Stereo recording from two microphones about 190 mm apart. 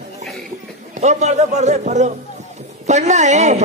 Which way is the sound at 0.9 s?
35° right (ahead or behind).